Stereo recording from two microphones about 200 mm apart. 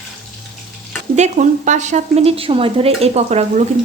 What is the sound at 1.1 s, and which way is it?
A woman's voice, 35° right (ahead or behind).